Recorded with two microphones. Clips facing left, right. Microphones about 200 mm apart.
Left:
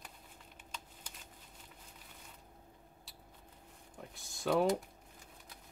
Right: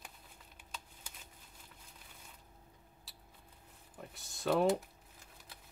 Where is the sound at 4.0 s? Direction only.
Centre (ahead or behind).